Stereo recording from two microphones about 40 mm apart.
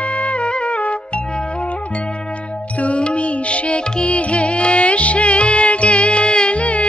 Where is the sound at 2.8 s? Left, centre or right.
Left.